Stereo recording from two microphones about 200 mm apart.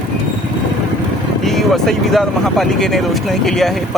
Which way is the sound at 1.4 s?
Centre (ahead or behind).